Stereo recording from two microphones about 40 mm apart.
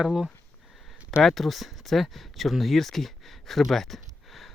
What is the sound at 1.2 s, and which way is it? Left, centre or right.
Speech, centre.